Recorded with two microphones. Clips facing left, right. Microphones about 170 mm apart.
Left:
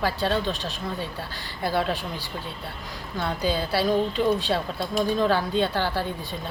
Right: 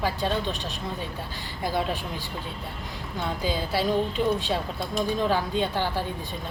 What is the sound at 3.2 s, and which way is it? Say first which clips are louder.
Speech: left 3 dB; 15° right (ahead or behind).